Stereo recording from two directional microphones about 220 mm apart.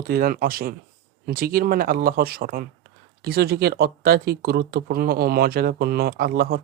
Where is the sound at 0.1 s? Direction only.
40° right (ahead or behind).